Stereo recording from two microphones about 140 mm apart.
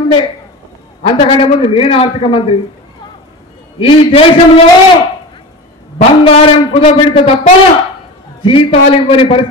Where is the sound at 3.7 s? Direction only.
40° left (ahead or behind).